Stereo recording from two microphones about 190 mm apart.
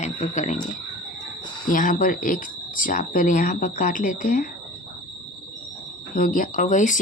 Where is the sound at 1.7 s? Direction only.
45° left (ahead or behind).